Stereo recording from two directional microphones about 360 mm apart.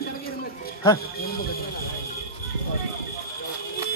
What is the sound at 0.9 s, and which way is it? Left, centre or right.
Speech, left.